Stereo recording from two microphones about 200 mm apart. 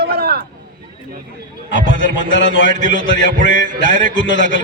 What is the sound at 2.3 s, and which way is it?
Speech, 70° left (ahead or behind).